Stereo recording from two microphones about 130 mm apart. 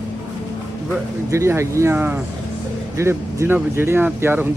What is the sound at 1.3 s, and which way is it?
Speech, 20° right (ahead or behind).